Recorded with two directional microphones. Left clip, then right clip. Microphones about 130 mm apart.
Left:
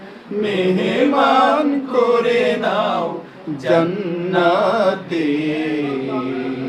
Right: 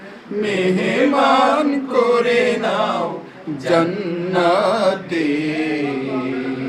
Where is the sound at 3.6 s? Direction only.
15° left (ahead or behind).